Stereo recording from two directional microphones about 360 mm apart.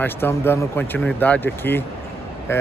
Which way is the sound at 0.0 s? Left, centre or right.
Centre.